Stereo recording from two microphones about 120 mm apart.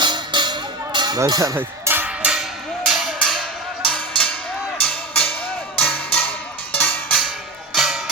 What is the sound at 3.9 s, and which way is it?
Music, 10° left (ahead or behind).